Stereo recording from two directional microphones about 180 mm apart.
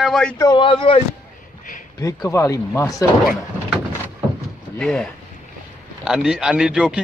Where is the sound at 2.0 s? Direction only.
15° left (ahead or behind).